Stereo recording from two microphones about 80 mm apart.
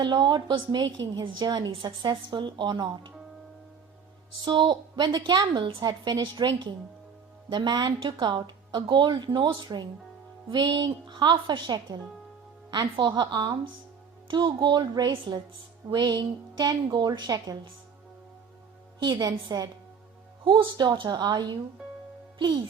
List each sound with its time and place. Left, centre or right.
0.0 s a woman's voice: right
4.4 s a woman's voice: right
19.1 s a woman's voice: right
20.4 s a woman's voice: right